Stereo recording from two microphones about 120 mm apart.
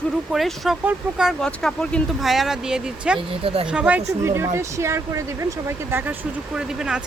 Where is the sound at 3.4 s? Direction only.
50° right (ahead or behind).